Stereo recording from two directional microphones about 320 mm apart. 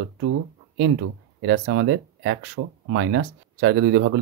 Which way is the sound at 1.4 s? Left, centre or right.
Right.